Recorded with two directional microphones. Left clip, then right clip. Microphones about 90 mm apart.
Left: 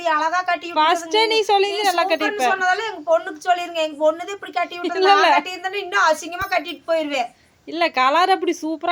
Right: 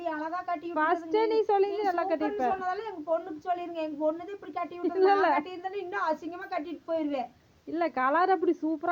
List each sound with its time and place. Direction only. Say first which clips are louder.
0.0 s a woman's voice: left 14 dB; 30° left (ahead or behind)
7.7 s a woman's voice: left 10 dB; 20° left (ahead or behind)